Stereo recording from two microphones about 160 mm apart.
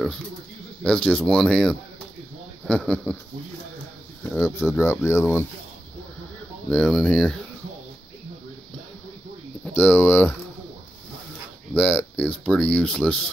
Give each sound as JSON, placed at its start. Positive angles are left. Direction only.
{"t": 0.8, "sound": "speech", "side_deg": 5}
{"t": 4.3, "sound": "speech", "side_deg": 15}
{"t": 6.7, "sound": "speech", "side_deg": 5}
{"t": 9.8, "sound": "speech", "side_deg": 5}
{"t": 11.7, "sound": "speech", "side_deg": 10}